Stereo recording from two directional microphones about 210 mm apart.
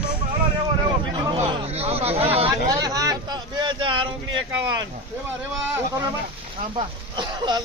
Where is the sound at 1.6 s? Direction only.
30° right (ahead or behind).